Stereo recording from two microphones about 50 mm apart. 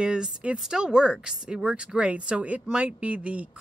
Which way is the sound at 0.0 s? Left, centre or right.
Centre.